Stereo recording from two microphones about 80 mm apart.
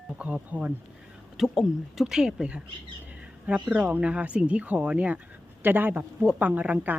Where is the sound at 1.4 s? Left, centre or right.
Centre.